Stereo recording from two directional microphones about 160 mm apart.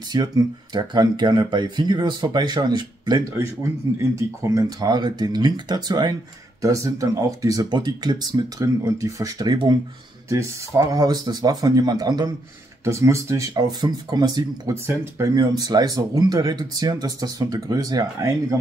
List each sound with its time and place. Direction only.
0.1 s speech: 25° right (ahead or behind)